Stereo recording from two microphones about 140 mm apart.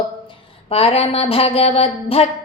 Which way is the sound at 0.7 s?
45° left (ahead or behind).